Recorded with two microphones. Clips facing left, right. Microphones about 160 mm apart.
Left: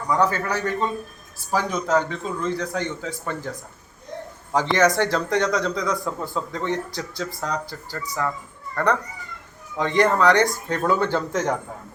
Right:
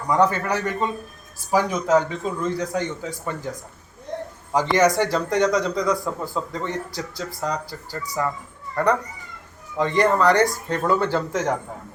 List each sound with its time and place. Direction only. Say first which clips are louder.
0.1 s a man's voice: right 2 dB; 20° right (ahead or behind)